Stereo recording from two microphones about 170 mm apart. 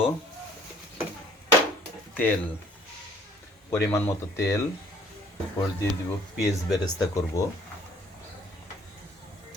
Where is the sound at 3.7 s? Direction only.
15° left (ahead or behind).